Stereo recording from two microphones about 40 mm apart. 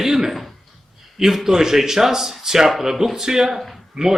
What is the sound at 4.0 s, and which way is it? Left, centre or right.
Speech, right.